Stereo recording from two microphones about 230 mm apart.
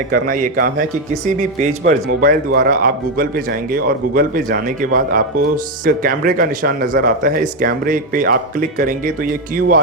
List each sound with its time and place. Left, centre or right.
0.1 s speech: right